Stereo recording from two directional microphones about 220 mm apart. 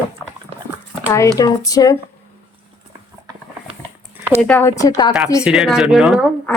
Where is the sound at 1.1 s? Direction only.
15° left (ahead or behind).